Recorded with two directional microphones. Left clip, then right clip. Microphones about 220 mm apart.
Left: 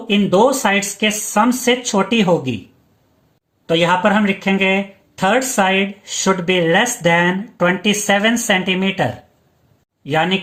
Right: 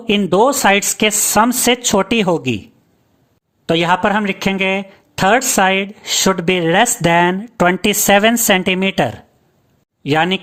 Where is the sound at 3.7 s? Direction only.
50° right (ahead or behind).